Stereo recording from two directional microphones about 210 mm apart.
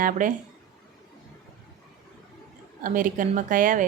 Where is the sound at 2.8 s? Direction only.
40° right (ahead or behind).